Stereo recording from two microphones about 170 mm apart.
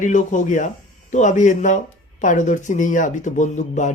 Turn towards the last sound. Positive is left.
turn(degrees=45)  # may be behind; listen again after turning